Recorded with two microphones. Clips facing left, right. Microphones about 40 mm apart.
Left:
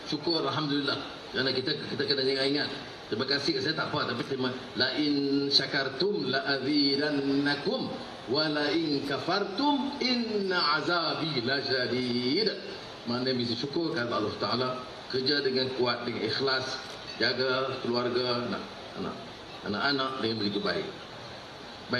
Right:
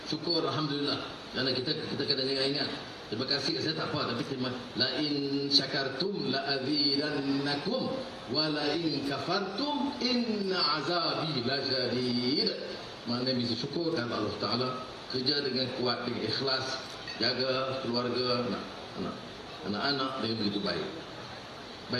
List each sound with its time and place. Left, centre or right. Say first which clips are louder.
0.3 s a man's voice: even; left